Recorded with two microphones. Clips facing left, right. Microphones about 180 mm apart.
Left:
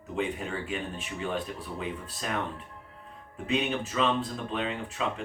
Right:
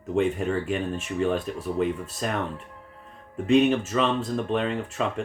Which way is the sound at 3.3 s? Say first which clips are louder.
Right 10 dB; 45° right (ahead or behind).